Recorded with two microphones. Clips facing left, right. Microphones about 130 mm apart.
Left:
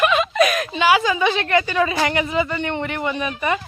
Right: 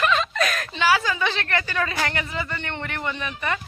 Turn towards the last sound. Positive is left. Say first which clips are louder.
# left 6 dB
turn(degrees=15)  # may be behind; listen again after turning